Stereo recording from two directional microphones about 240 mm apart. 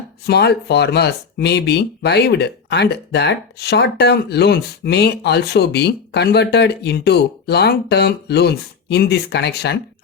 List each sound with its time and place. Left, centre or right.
0.3 s speech: left